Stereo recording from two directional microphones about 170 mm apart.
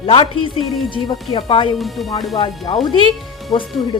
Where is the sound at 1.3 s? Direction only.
30° left (ahead or behind).